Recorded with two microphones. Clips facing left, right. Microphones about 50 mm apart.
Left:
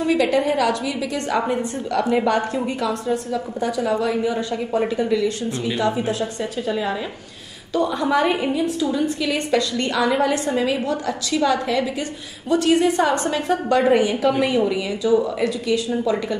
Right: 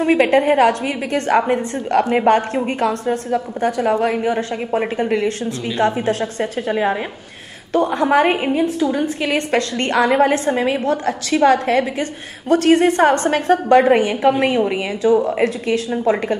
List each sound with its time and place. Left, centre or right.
0.0 s a woman's voice: right